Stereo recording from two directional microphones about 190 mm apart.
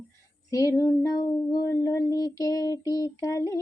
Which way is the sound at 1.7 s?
15° left (ahead or behind).